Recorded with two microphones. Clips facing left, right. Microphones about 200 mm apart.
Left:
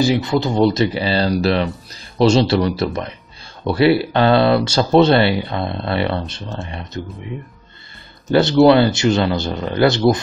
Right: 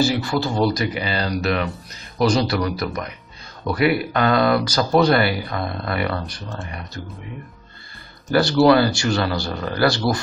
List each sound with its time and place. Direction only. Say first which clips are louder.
0.0 s speech: left 4 dB; 20° left (ahead or behind)
0.7 s speech: left 6 dB; 30° left (ahead or behind)
8.3 s speech: left 4 dB; 20° left (ahead or behind)